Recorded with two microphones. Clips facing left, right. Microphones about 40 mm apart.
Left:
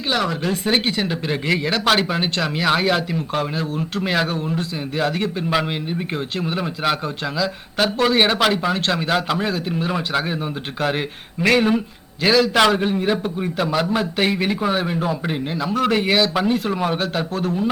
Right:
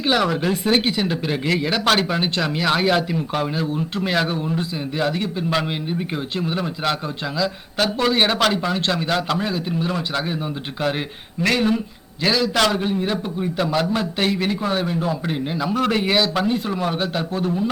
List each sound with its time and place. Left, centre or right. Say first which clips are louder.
0.1 s speech: right 2 dB; centre
0.7 s speech: even; centre
14.3 s speech: left 1 dB; left
17.3 s speech: even; centre